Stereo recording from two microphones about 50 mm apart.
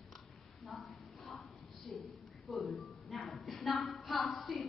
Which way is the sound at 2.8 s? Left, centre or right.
Centre.